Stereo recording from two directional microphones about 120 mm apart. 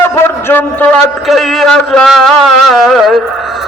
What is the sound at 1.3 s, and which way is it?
Speech, centre (ahead or behind).